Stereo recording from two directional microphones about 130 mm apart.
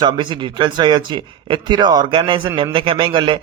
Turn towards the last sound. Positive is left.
turn(degrees=-40)  # may be behind; listen again after turning